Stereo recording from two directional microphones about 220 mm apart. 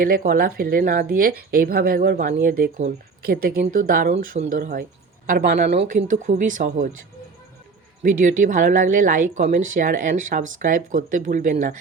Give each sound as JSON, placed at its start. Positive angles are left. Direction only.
{"t": 0.0, "sound": "speech", "side_deg": -40}
{"t": 5.7, "sound": "speech", "side_deg": -30}
{"t": 8.0, "sound": "speech", "side_deg": -35}